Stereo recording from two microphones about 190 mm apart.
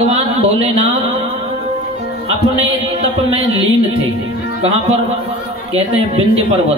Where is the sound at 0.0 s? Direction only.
35° right (ahead or behind).